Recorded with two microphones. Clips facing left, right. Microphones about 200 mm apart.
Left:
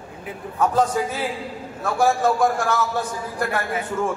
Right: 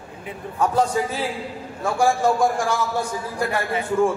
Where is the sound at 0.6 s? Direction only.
10° right (ahead or behind).